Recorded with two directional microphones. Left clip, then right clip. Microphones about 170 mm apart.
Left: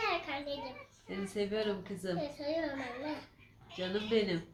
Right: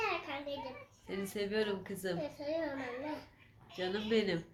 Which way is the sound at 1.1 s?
65° right (ahead or behind).